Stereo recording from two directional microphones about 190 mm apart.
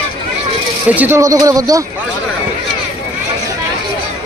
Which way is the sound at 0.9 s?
10° right (ahead or behind).